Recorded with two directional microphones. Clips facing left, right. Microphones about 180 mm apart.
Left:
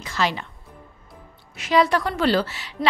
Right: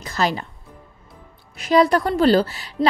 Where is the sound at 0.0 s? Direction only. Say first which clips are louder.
Right 2 dB; 40° right (ahead or behind).